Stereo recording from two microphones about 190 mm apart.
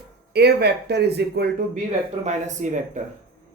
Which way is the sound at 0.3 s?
60° right (ahead or behind).